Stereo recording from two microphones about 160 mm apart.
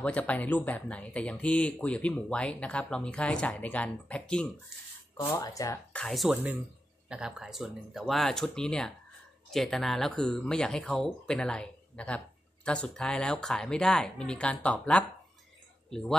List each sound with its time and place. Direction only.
0.0 s speech: 10° left (ahead or behind)
5.9 s speech: centre (ahead or behind)